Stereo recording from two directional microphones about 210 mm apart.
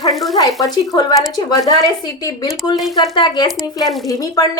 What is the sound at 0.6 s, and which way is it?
A woman's voice, 15° left (ahead or behind).